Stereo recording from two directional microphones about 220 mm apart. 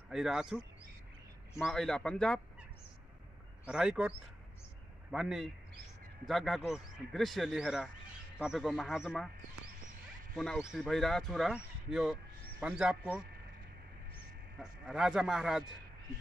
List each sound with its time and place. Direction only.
0.1 s speech: centre (ahead or behind)
1.6 s speech: centre (ahead or behind)
3.6 s speech: 5° right (ahead or behind)
5.1 s speech: centre (ahead or behind)
10.3 s speech: centre (ahead or behind)
14.6 s speech: centre (ahead or behind)